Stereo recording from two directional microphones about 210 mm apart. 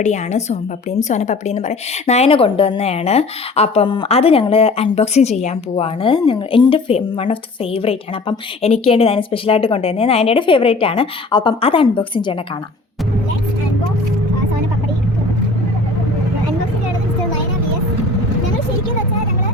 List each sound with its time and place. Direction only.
0.0 s a woman's voice: 35° left (ahead or behind)